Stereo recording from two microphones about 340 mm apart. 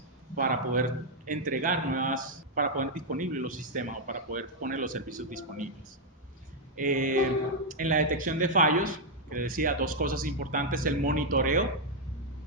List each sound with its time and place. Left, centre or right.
0.3 s a man's voice: right
6.7 s a man's voice: right